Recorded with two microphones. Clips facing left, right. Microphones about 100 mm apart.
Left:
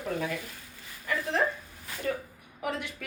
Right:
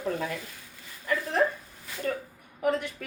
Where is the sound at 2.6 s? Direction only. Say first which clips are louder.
Right 6 dB; 40° right (ahead or behind).